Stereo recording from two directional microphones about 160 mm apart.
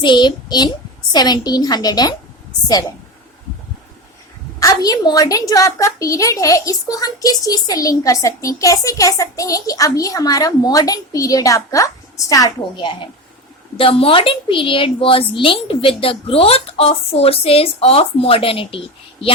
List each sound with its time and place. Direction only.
0.0 s a woman's voice: 30° left (ahead or behind)
4.6 s a woman's voice: 25° left (ahead or behind)